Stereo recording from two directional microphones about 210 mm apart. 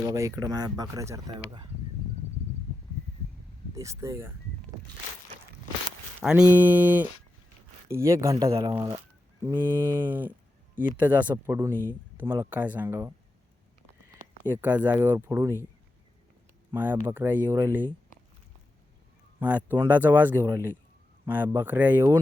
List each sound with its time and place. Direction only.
0.0 s speech: 15° right (ahead or behind)
3.8 s speech: 15° right (ahead or behind)
6.2 s speech: 5° right (ahead or behind)
14.4 s speech: 10° right (ahead or behind)
16.7 s speech: 10° right (ahead or behind)
19.4 s speech: 5° right (ahead or behind)